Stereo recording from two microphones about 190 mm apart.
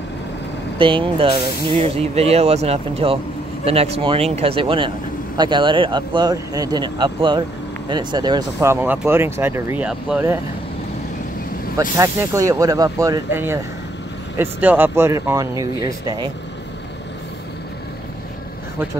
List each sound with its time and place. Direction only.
0.7 s speech: 25° right (ahead or behind); by 10.4 s 10° right (ahead or behind)
12.0 s speech: 15° right (ahead or behind)